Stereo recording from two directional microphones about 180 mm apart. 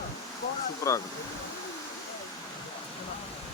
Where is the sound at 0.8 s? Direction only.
15° left (ahead or behind).